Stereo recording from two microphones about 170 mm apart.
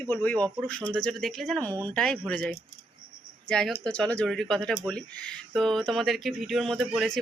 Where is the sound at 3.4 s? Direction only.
5° left (ahead or behind).